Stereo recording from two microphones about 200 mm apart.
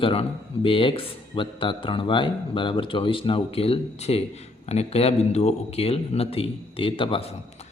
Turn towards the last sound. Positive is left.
turn(degrees=30)  # may be behind; listen again after turning